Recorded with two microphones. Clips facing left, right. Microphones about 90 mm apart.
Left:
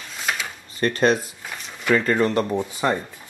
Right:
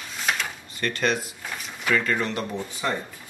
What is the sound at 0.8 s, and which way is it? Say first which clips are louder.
Speech: left 6 dB; 35° left (ahead or behind).